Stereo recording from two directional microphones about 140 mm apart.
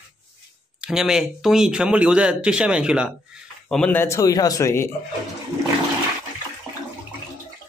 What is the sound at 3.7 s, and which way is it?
Speech, 10° left (ahead or behind).